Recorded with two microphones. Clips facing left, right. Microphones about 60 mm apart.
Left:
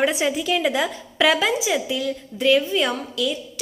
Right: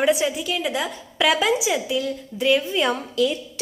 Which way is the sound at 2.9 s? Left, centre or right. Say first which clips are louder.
Right 3 dB; right.